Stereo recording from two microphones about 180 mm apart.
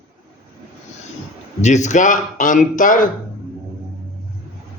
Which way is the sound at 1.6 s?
40° left (ahead or behind).